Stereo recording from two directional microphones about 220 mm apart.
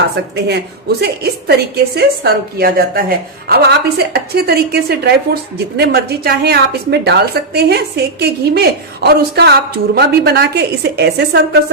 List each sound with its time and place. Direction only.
1.0 s a woman's voice: 45° right (ahead or behind)